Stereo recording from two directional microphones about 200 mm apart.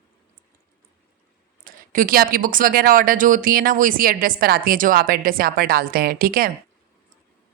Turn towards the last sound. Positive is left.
turn(degrees=-45)  # may be behind; listen again after turning